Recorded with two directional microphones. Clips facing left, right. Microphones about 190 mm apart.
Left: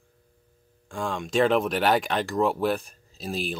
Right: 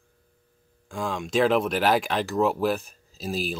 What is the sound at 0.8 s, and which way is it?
Speech, centre (ahead or behind).